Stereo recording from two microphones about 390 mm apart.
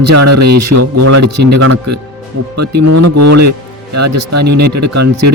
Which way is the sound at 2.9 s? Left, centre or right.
Right.